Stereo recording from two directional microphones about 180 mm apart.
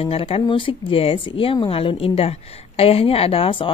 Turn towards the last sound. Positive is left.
turn(degrees=30)  # may be behind; listen again after turning